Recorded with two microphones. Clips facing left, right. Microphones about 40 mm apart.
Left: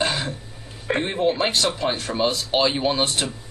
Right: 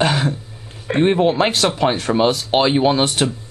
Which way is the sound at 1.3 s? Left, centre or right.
Right.